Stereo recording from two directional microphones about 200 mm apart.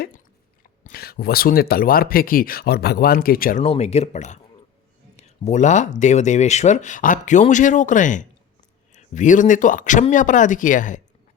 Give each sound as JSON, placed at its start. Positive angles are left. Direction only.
{"t": 0.9, "sound": "speech", "side_deg": 50}
{"t": 3.6, "sound": "speech", "side_deg": 30}